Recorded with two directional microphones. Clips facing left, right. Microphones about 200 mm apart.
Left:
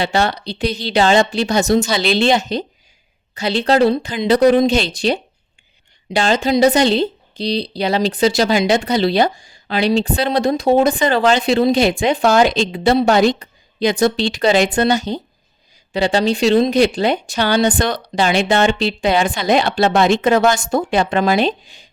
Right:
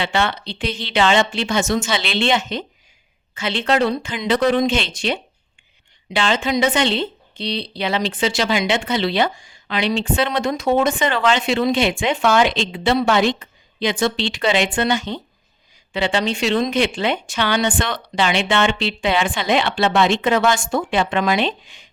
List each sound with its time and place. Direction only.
0.0 s a woman's voice: 40° left (ahead or behind)